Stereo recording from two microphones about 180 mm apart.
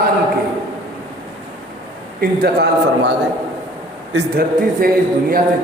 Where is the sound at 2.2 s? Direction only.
60° right (ahead or behind).